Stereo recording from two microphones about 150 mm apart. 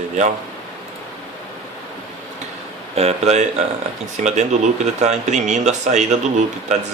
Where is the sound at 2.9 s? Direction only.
45° right (ahead or behind).